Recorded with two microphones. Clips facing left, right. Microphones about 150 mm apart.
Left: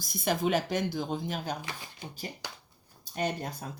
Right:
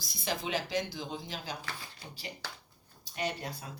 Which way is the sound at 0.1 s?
50° left (ahead or behind).